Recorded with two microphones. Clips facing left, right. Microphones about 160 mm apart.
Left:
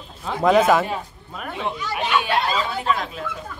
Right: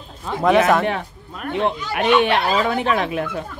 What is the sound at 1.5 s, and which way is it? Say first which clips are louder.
Speech: right 6 dB; 65° right (ahead or behind).